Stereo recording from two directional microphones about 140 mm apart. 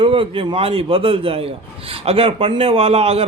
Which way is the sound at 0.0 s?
40° right (ahead or behind).